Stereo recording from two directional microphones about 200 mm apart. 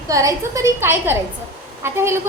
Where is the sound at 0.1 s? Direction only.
15° right (ahead or behind).